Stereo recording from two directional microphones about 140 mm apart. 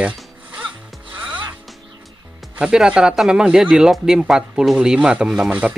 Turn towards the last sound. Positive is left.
turn(degrees=-5)  # may be behind; listen again after turning